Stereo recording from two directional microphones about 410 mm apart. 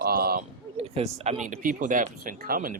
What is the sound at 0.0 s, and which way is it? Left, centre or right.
Speech, right.